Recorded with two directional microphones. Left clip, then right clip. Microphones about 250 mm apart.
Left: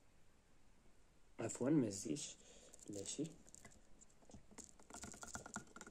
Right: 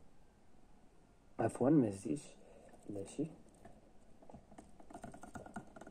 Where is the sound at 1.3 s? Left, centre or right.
Centre.